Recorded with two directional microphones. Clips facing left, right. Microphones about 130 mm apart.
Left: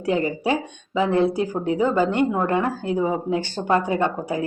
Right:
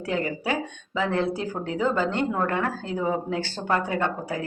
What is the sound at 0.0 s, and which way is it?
A woman's voice, 20° left (ahead or behind).